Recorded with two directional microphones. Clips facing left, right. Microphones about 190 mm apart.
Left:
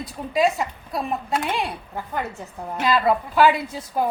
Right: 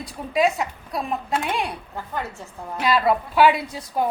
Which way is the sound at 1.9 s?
15° left (ahead or behind).